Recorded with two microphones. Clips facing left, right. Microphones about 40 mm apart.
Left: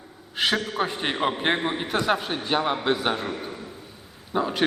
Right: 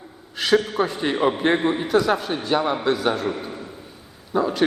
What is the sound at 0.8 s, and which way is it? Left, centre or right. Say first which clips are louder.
Speech: right 4 dB; left.